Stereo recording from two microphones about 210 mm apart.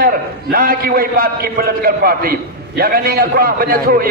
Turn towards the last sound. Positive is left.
turn(degrees=-45)  # may be behind; listen again after turning